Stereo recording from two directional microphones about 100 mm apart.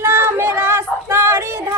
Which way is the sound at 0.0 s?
25° right (ahead or behind).